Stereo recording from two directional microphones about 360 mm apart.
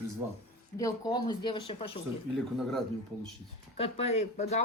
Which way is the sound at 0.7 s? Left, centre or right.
Centre.